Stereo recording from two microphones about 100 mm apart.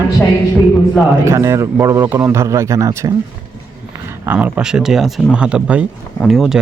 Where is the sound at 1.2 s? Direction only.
25° right (ahead or behind).